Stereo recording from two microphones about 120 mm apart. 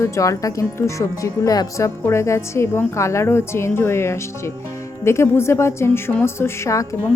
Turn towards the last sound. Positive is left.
turn(degrees=25)  # may be behind; listen again after turning